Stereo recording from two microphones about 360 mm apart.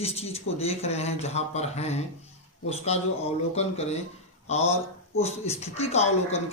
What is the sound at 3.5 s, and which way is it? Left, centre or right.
Speech, centre.